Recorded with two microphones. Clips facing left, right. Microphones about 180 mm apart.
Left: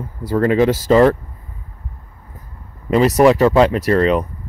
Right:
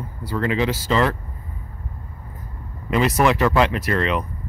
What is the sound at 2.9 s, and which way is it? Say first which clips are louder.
Speech: left 7 dB; 35° left (ahead or behind).